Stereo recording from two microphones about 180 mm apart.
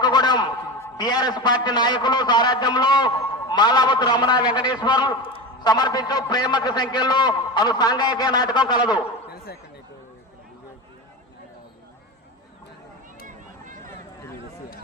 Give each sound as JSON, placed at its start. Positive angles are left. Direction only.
{"t": 0.0, "sound": "a man's voice", "side_deg": 25}